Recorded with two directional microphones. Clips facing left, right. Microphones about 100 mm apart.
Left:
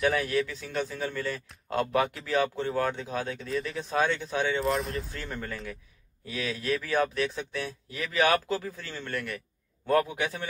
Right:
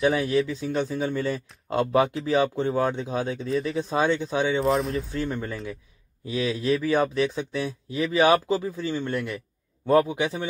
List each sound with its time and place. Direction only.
0.2 s speech: 20° right (ahead or behind)
4.6 s speech: centre (ahead or behind)
5.1 s speech: 15° right (ahead or behind)